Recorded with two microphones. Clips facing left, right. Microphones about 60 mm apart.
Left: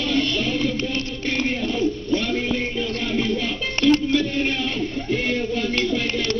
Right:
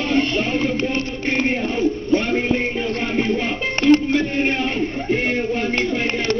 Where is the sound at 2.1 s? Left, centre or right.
Right.